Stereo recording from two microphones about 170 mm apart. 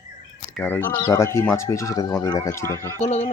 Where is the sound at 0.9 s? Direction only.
25° left (ahead or behind).